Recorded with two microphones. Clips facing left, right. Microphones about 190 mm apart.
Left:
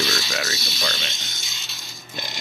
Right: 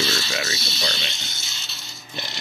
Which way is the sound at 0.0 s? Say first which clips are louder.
Even; 15° left (ahead or behind).